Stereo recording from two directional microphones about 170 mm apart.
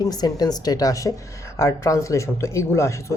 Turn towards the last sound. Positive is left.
turn(degrees=15)  # may be behind; listen again after turning